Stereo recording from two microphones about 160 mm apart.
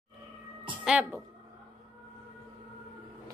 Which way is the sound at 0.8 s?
5° right (ahead or behind).